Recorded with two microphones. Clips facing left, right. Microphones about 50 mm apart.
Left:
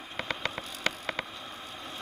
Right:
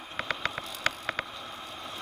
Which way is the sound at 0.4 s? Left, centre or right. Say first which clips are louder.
Right 2 dB; right.